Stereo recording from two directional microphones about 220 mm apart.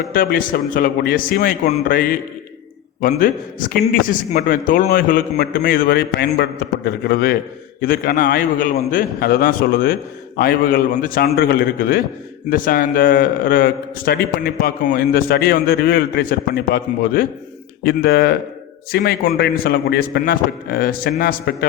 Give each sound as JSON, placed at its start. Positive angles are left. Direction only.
{"t": 0.1, "sound": "a man's voice", "side_deg": 40}